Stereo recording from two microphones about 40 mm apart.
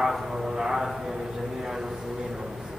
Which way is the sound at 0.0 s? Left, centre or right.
Centre.